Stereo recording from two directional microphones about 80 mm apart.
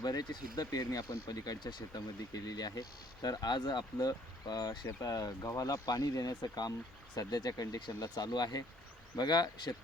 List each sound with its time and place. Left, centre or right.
0.0 s speech: left
4.9 s speech: left